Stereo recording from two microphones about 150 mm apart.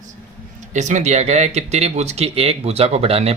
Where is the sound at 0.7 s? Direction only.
50° right (ahead or behind).